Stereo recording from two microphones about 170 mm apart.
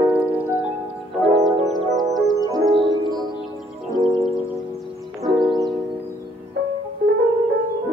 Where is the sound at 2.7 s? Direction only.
30° right (ahead or behind).